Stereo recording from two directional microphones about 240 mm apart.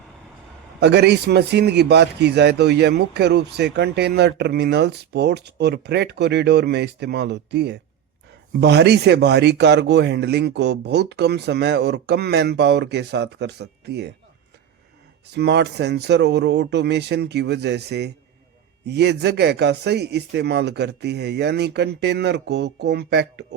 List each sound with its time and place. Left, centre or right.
0.8 s a man's voice: right
15.3 s a man's voice: right